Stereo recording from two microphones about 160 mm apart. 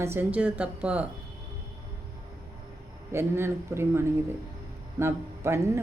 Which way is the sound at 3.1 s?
15° right (ahead or behind).